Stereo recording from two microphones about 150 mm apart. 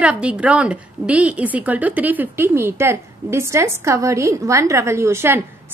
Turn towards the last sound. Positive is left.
turn(degrees=-15)  # may be behind; listen again after turning